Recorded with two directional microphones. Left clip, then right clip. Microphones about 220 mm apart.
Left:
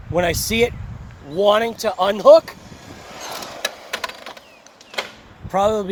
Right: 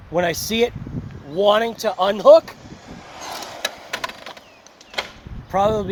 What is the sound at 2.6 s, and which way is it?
Vehicle, 30° left (ahead or behind).